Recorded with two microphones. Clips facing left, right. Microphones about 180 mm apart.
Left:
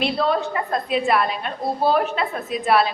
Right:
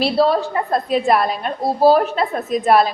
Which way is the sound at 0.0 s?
35° right (ahead or behind).